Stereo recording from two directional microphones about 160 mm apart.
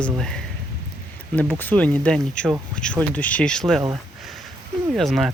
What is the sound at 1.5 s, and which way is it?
Speech, 10° left (ahead or behind).